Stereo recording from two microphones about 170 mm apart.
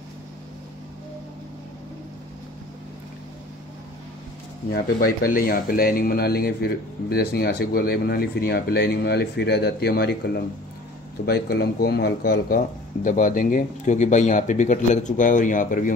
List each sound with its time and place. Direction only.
4.6 s speech: 60° left (ahead or behind)